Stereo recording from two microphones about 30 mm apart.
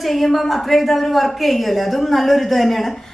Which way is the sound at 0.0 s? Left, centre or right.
Centre.